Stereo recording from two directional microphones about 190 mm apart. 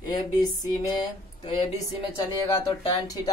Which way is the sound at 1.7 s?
20° left (ahead or behind).